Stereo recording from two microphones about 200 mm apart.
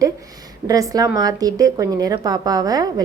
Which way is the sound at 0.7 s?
15° right (ahead or behind).